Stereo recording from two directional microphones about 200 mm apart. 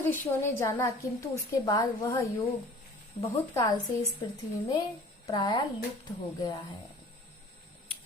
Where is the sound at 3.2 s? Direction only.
15° left (ahead or behind).